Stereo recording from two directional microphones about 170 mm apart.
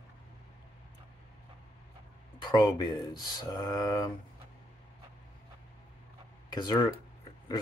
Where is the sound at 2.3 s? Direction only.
25° left (ahead or behind).